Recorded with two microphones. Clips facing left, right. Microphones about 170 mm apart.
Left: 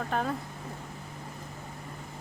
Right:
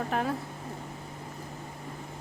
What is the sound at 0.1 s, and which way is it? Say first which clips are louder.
Speech: even; 5° right (ahead or behind).